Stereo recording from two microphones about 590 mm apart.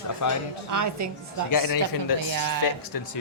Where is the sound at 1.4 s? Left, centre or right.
Left.